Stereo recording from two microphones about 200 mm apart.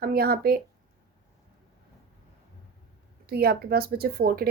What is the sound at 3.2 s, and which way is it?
Speech, 50° right (ahead or behind).